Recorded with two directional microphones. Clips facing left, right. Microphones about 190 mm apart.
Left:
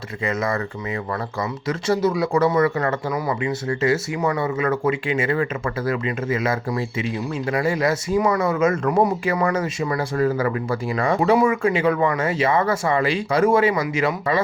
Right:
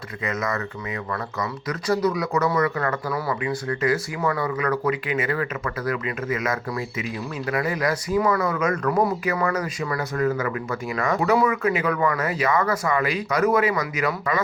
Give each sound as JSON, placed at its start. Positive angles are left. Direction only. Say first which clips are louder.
{"t": 0.3, "sound": "speech", "louder": "left 3 dB", "side_deg": 30}